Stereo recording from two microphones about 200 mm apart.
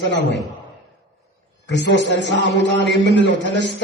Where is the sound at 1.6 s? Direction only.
60° left (ahead or behind).